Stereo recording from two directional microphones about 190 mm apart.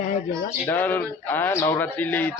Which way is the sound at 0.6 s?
10° left (ahead or behind).